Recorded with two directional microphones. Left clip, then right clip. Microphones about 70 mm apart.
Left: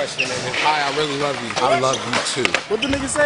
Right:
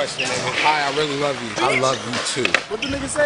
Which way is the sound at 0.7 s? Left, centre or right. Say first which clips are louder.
Left 1 dB; centre.